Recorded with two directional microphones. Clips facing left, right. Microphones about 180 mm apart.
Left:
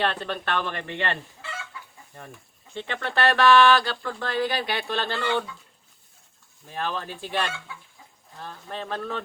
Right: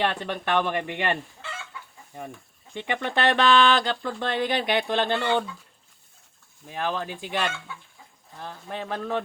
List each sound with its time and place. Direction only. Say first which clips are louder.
0.0 s speech: even; 15° right (ahead or behind)
2.7 s speech: right 1 dB; 15° right (ahead or behind)
6.7 s speech: right 2 dB; 15° right (ahead or behind)
8.4 s speech: right 1 dB; 15° right (ahead or behind)